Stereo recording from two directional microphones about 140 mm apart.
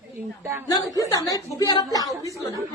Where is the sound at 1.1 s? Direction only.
25° left (ahead or behind).